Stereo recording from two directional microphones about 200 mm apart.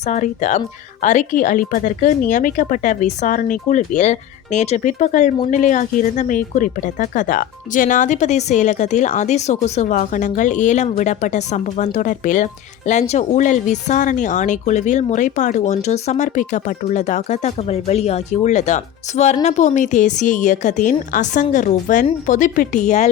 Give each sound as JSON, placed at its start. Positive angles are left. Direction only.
{"t": 0.1, "sound": "speech", "side_deg": 35}